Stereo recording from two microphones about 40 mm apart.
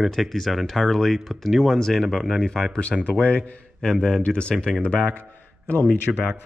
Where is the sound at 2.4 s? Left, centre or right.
Centre.